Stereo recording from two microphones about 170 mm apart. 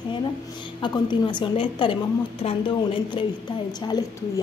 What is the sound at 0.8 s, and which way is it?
A woman's voice, 25° left (ahead or behind).